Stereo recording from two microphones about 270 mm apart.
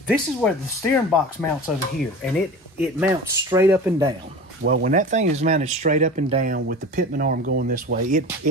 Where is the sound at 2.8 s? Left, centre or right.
Centre.